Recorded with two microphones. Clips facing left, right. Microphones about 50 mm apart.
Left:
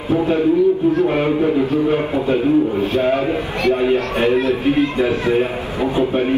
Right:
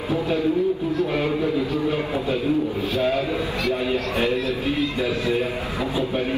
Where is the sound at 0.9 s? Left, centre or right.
Left.